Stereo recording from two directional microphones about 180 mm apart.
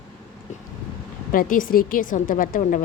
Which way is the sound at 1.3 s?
50° left (ahead or behind).